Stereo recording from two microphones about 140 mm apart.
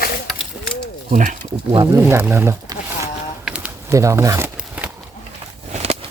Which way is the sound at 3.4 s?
10° right (ahead or behind).